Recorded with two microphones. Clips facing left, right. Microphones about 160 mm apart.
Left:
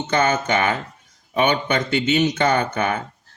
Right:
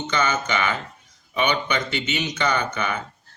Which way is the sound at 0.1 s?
50° left (ahead or behind).